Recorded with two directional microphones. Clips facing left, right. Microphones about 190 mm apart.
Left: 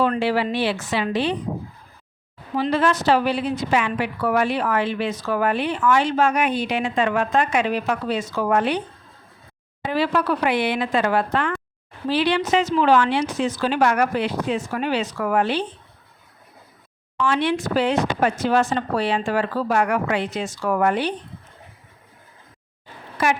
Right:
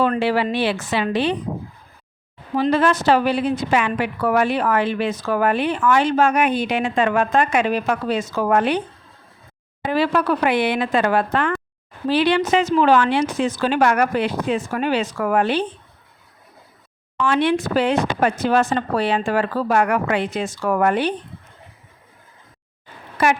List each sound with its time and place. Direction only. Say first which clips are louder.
0.0 s speech: right 2 dB; 55° right (ahead or behind)
2.6 s a woman's voice: right 3 dB; 50° right (ahead or behind)
9.8 s a woman's voice: right 2 dB; 50° right (ahead or behind)
17.2 s speech: right 3 dB; 55° right (ahead or behind)